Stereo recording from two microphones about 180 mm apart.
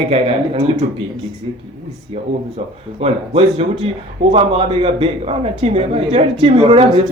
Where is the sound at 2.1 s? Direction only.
35° right (ahead or behind).